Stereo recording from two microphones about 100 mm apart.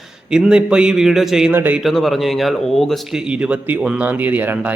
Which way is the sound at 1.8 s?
Centre (ahead or behind).